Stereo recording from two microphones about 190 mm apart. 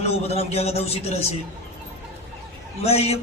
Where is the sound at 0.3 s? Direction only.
35° left (ahead or behind).